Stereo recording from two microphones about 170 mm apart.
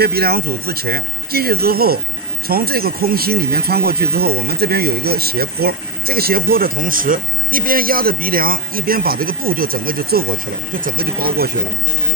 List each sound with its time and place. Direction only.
0.0 s speech: 65° right (ahead or behind)